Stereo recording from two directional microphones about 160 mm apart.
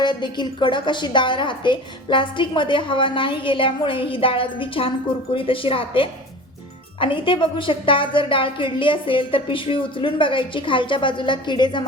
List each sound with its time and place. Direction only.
0.0 s a woman's voice: 30° left (ahead or behind)